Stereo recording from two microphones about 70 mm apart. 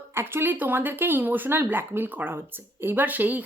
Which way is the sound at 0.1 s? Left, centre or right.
Right.